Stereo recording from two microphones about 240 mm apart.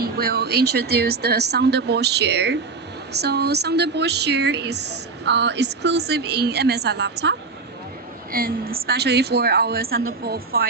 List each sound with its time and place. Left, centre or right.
0.0 s a woman's voice: right